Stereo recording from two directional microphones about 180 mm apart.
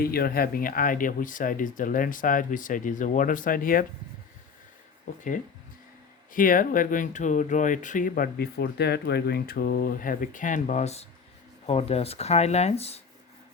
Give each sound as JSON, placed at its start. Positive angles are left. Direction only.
{"t": 0.0, "sound": "speech", "side_deg": 55}
{"t": 5.1, "sound": "speech", "side_deg": 45}
{"t": 6.3, "sound": "speech", "side_deg": 50}